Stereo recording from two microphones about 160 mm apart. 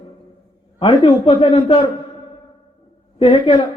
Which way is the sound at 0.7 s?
35° left (ahead or behind).